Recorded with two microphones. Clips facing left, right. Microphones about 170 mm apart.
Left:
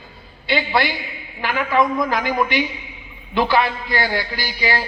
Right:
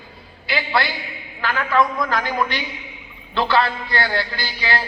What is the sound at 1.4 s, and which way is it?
A man's voice, 10° left (ahead or behind).